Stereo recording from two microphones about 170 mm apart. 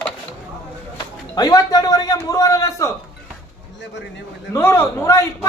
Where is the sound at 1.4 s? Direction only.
20° left (ahead or behind).